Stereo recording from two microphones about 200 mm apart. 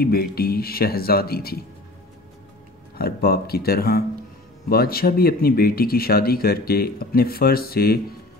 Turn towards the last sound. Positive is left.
turn(degrees=50)  # may be behind; listen again after turning